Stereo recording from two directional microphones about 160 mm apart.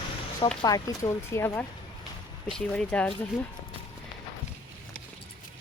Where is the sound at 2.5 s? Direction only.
5° left (ahead or behind).